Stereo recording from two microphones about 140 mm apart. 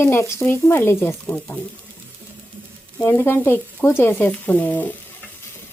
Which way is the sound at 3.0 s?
15° left (ahead or behind).